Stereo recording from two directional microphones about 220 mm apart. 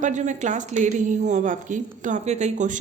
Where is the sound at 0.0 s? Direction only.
35° right (ahead or behind).